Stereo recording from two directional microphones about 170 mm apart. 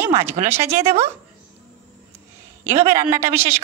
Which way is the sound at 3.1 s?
15° right (ahead or behind).